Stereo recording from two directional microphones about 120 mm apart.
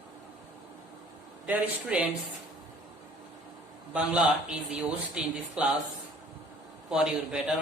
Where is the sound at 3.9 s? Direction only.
10° right (ahead or behind).